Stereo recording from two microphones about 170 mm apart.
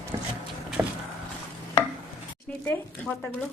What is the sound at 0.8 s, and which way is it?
Vehicle, 15° right (ahead or behind).